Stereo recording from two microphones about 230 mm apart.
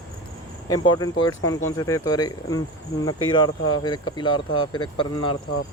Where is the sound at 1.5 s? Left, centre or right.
Centre.